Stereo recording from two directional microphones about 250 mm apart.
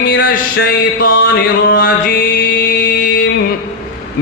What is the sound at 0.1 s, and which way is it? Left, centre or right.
Music, left.